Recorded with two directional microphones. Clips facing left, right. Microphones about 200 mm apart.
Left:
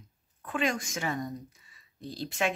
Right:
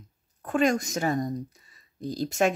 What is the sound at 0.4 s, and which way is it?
Speech, 45° right (ahead or behind).